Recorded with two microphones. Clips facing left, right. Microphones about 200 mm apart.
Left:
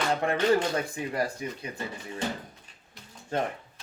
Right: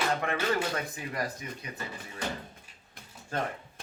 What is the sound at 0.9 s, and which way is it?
Speech, 30° left (ahead or behind).